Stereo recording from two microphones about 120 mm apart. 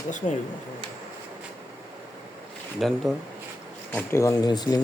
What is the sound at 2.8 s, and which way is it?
Speech, centre (ahead or behind).